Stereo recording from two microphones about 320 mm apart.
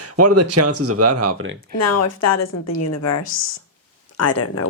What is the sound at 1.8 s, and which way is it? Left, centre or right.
A woman's voice, left.